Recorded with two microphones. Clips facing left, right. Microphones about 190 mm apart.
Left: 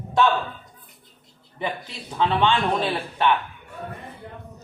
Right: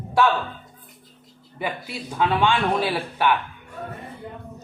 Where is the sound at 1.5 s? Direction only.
10° right (ahead or behind).